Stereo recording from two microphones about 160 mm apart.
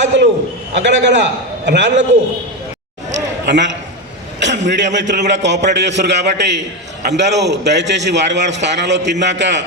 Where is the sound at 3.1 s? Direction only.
90° right.